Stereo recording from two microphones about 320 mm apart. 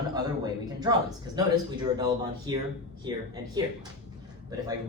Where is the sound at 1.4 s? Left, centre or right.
Centre.